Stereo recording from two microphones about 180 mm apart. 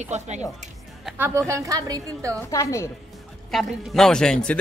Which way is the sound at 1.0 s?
10° right (ahead or behind).